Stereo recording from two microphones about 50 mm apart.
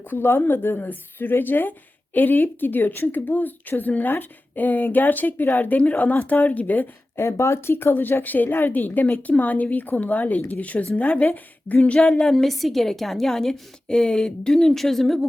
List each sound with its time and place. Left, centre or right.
0.0 s speech: left
7.2 s a woman's voice: left
11.9 s a woman's voice: centre
12.3 s a woman's voice: centre